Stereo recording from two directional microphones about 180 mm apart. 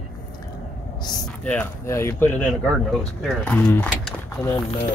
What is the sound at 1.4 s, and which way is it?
Speech, 10° left (ahead or behind).